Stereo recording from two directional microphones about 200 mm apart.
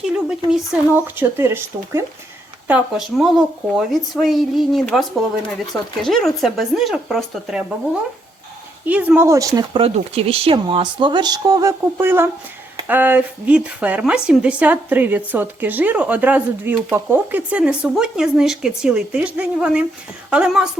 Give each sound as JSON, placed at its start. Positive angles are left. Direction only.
{"t": 0.0, "sound": "speech", "side_deg": -5}
{"t": 8.9, "sound": "speech", "side_deg": -10}
{"t": 9.6, "sound": "speech", "side_deg": -25}